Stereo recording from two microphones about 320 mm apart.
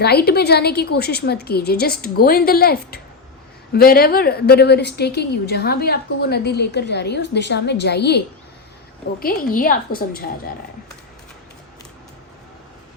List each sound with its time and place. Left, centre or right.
0.0 s a woman's voice: left
9.2 s a woman's voice: left